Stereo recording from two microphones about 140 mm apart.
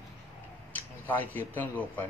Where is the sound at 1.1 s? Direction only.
10° left (ahead or behind).